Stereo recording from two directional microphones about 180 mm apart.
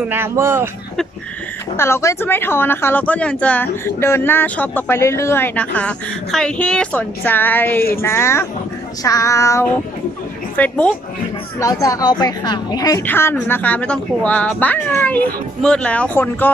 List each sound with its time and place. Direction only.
0.0 s speech: 10° right (ahead or behind)
1.8 s speech: 15° left (ahead or behind)
11.8 s speech: 20° left (ahead or behind)